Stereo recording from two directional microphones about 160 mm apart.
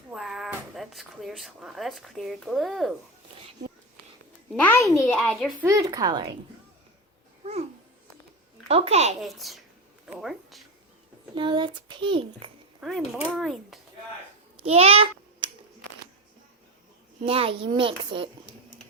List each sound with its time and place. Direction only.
0.1 s speech: centre (ahead or behind)
4.6 s a child's voice: 15° left (ahead or behind)
5.6 s a woman's voice: 20° right (ahead or behind)
8.6 s a child's voice: 40° right (ahead or behind)
9.2 s speech: centre (ahead or behind)
11.3 s a child's voice: 30° right (ahead or behind)
12.8 s speech: centre (ahead or behind)
14.6 s a sound: 40° right (ahead or behind)
17.2 s a child's voice: 35° right (ahead or behind)